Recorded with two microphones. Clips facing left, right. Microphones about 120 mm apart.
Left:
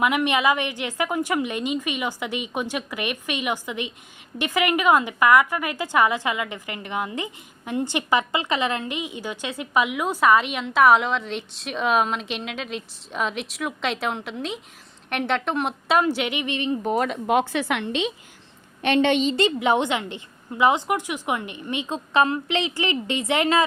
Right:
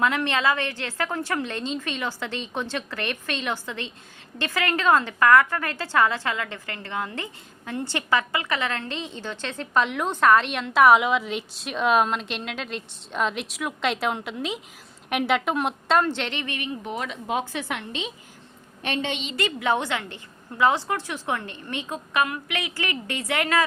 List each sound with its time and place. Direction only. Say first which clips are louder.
0.0 s a woman's voice: left 2 dB; 15° left (ahead or behind)
16.8 s a woman's voice: left 8 dB; 45° left (ahead or behind); by 19.1 s 70° left (ahead or behind)
19.1 s a woman's voice: left 11 dB; 40° left (ahead or behind)
19.4 s a woman's voice: left 4 dB; 25° left (ahead or behind)